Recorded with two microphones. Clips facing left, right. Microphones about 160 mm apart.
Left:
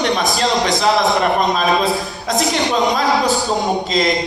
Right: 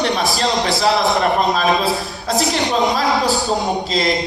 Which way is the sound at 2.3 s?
35° right (ahead or behind).